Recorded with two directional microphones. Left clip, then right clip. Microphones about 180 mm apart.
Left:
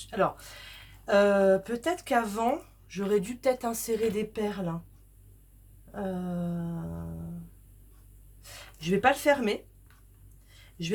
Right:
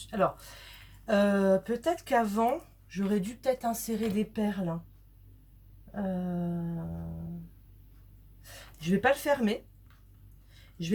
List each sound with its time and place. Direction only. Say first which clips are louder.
0.1 s a woman's voice: left 1 dB; 40° left (ahead or behind)
5.9 s speech: left 1 dB; 40° left (ahead or behind)
8.4 s speech: left 3 dB; 40° left (ahead or behind)